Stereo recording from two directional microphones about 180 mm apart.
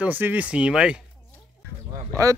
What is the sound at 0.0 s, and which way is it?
Speech, 10° right (ahead or behind).